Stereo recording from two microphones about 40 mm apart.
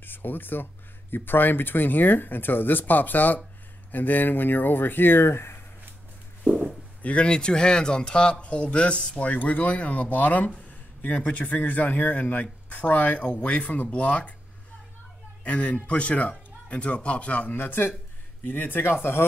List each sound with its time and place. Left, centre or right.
0.0 s speech: left
7.0 s speech: left
7.2 s speech: left
10.7 s a sound: left
11.2 s speech: left
15.4 s speech: left
17.6 s speech: left